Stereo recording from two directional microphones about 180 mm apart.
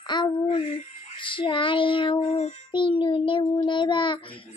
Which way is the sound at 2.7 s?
25° left (ahead or behind).